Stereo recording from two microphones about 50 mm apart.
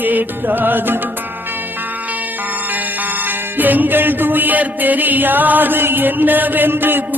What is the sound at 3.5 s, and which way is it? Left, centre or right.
Music, right.